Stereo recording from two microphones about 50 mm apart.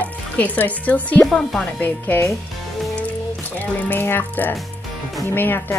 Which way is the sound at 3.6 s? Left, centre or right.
Left.